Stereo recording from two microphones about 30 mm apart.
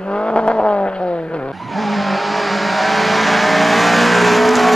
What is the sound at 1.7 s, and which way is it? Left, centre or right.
Vehicle, centre.